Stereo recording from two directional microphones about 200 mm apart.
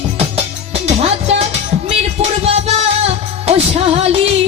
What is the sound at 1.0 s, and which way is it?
Music, 30° right (ahead or behind).